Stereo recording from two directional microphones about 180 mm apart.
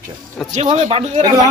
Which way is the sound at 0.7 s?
40° right (ahead or behind).